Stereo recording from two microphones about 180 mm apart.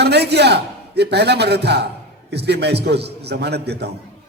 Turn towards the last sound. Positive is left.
turn(degrees=-65)  # may be behind; listen again after turning